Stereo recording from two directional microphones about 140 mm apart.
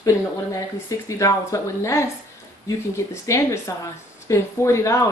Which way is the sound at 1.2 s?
20° left (ahead or behind).